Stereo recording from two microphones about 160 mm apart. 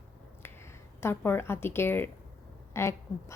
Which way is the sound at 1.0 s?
15° left (ahead or behind).